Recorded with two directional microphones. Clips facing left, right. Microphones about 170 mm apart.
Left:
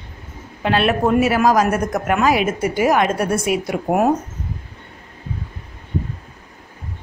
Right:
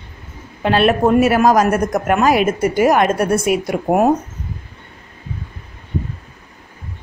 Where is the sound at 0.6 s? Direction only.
40° right (ahead or behind).